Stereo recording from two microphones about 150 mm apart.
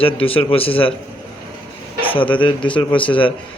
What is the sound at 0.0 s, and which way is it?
Speech, 40° left (ahead or behind).